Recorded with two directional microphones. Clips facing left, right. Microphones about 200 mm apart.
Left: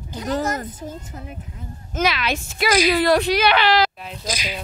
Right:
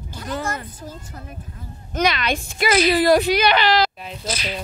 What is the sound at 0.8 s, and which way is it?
Speech, 20° left (ahead or behind).